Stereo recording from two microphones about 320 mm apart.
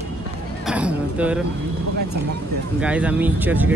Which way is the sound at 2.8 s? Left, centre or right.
Centre.